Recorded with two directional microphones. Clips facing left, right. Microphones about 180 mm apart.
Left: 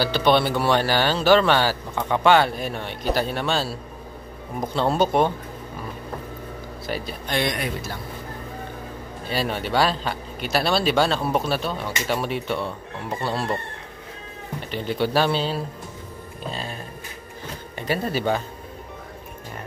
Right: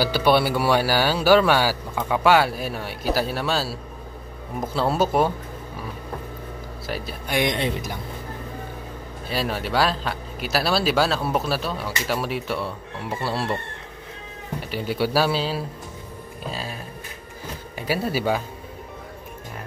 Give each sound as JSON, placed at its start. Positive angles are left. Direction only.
{"t": 0.0, "sound": "a man's voice", "side_deg": -10}
{"t": 6.9, "sound": "speech", "side_deg": -5}
{"t": 7.3, "sound": "speech", "side_deg": -20}
{"t": 9.3, "sound": "speech", "side_deg": 0}
{"t": 14.7, "sound": "speech", "side_deg": -5}
{"t": 17.7, "sound": "a man's voice", "side_deg": -5}